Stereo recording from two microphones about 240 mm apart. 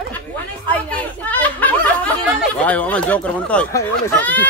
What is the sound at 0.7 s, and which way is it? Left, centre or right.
Chatter, centre.